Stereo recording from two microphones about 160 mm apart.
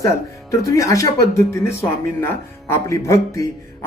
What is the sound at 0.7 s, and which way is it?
Speech, 20° left (ahead or behind).